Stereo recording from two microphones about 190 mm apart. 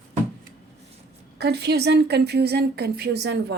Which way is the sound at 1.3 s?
60° right (ahead or behind).